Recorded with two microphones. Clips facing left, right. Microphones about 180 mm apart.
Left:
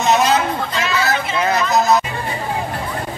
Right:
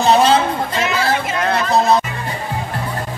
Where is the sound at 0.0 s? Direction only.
30° right (ahead or behind).